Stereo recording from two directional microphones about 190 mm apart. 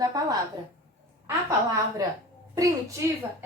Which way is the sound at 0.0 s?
20° right (ahead or behind).